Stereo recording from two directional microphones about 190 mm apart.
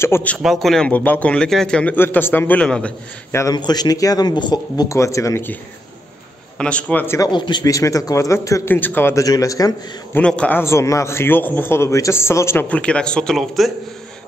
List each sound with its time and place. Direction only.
0.0 s a man's voice: 10° left (ahead or behind)
6.6 s a man's voice: 5° left (ahead or behind)
10.2 s a man's voice: 5° left (ahead or behind)